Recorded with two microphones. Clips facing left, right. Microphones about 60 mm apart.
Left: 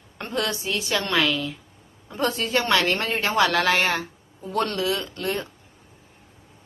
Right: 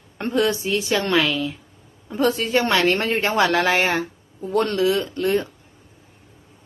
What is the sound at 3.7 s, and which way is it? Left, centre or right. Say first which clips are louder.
Speech: right 2 dB; centre.